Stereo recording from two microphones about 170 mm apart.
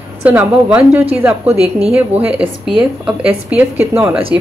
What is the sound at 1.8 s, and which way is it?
Speech, 35° right (ahead or behind).